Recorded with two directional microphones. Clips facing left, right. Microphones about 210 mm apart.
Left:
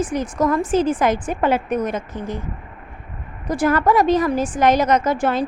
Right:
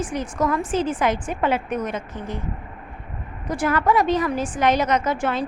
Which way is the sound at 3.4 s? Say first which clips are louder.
Left 3 dB; 40° left (ahead or behind).